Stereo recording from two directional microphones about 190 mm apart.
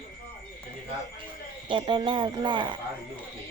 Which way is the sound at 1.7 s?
25° right (ahead or behind).